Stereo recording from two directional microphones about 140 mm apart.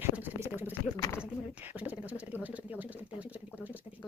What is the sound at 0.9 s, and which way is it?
Speech, 25° left (ahead or behind).